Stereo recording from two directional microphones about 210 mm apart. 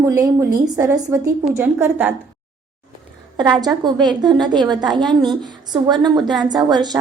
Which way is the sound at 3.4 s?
20° right (ahead or behind).